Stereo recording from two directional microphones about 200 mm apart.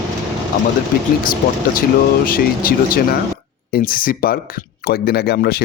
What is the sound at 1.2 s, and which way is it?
Speech, 45° left (ahead or behind).